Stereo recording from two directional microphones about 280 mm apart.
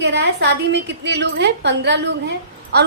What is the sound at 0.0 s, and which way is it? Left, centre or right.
A woman's voice, right.